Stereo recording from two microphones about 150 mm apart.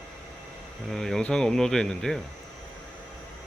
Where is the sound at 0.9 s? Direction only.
5° left (ahead or behind).